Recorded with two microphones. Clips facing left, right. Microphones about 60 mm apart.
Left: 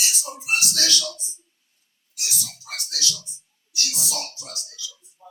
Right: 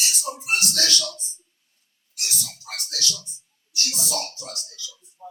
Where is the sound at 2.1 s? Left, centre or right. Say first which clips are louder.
Even; right.